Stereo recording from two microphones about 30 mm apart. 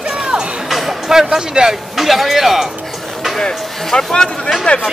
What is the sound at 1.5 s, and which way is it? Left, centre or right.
Speech, right.